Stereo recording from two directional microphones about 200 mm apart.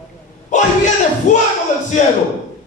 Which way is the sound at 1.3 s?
35° left (ahead or behind).